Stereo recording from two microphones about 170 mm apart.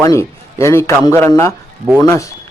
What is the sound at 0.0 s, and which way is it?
A man's voice, 15° left (ahead or behind).